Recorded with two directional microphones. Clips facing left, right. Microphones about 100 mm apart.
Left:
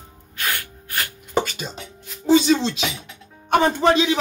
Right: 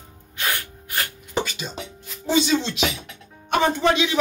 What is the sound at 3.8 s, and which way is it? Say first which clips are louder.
Speech: left 3 dB; 35° left (ahead or behind).